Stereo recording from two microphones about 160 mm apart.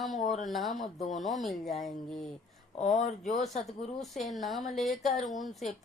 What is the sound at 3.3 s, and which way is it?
A woman's voice, centre (ahead or behind).